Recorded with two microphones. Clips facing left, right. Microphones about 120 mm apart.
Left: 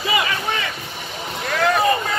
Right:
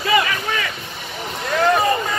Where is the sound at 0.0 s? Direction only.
20° left (ahead or behind).